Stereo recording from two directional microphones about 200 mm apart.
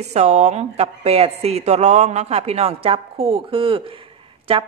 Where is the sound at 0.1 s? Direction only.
35° right (ahead or behind).